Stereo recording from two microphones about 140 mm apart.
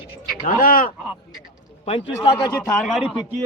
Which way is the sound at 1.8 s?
45° left (ahead or behind).